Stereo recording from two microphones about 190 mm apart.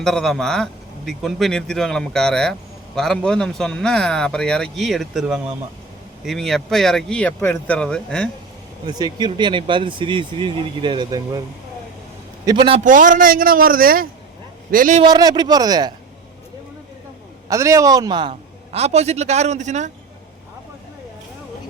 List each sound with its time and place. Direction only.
0.0 s speech: 5° left (ahead or behind)
8.9 s speech: 20° right (ahead or behind)
12.5 s speech: 25° right (ahead or behind)
12.8 s a man's voice: 45° right (ahead or behind)
15.0 s speech: 20° right (ahead or behind)
17.5 s a man's voice: 15° right (ahead or behind); by 19.9 s 40° right (ahead or behind)